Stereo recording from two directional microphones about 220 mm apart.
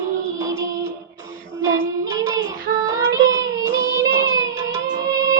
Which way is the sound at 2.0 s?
15° right (ahead or behind).